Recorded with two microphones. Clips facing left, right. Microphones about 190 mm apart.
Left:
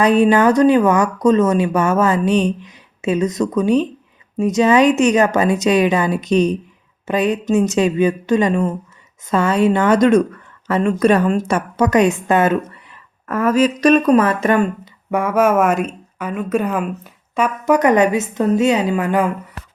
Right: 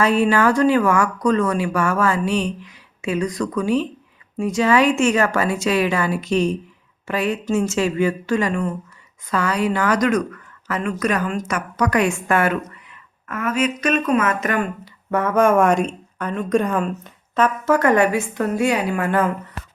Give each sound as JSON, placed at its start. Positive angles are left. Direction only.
{"t": 0.0, "sound": "speech", "side_deg": 20}
{"t": 13.2, "sound": "speech", "side_deg": 35}
{"t": 15.1, "sound": "speech", "side_deg": 10}